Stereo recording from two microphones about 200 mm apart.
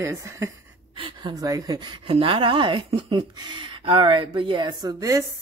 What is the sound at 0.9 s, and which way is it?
A woman's voice, 25° right (ahead or behind).